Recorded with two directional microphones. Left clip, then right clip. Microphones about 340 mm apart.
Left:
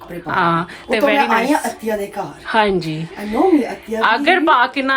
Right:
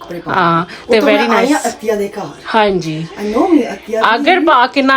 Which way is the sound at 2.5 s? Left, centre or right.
Centre.